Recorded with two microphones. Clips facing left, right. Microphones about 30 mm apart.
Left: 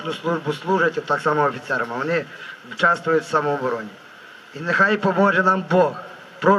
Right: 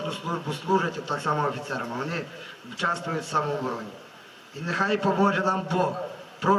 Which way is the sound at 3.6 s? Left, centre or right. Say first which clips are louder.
Left 7 dB; left.